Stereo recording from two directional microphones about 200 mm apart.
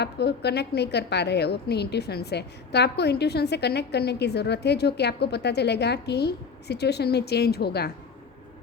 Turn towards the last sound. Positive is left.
turn(degrees=55)  # may be behind; listen again after turning